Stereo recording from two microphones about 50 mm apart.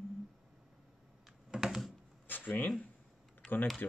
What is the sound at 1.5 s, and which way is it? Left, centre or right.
Computer keyboard, centre.